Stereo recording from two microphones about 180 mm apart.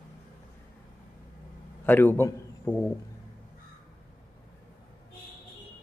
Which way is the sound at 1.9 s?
10° left (ahead or behind).